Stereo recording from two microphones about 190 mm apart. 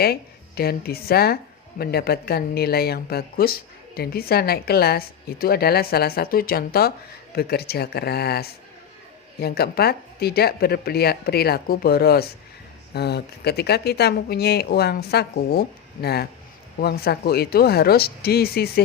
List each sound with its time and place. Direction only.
0.0 s speech: 55° left (ahead or behind)